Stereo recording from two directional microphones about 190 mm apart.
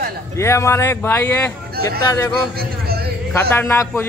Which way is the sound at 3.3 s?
10° left (ahead or behind).